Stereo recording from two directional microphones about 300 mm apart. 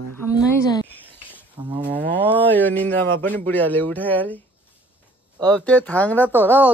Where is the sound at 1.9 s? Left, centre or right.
Centre.